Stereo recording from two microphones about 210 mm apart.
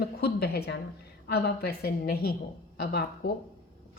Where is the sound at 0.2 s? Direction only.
50° left (ahead or behind).